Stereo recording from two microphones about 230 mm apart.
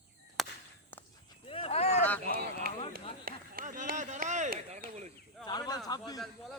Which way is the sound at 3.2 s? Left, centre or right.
Right.